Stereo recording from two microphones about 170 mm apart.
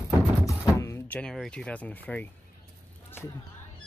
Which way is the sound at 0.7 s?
15° left (ahead or behind).